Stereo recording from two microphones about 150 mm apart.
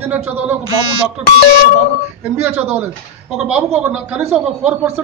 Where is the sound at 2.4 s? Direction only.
10° right (ahead or behind).